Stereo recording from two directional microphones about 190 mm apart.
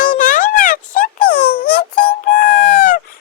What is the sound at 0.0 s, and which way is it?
Music, 45° left (ahead or behind).